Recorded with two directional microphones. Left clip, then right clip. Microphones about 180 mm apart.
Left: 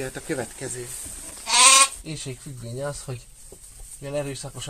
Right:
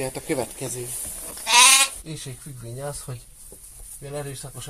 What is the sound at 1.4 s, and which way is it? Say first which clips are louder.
Goat: right 2 dB; 60° right (ahead or behind).